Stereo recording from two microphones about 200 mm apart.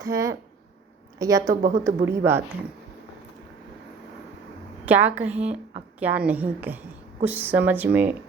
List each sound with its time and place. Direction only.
0.0 s a woman's voice: 15° right (ahead or behind)
4.9 s a woman's voice: 10° right (ahead or behind)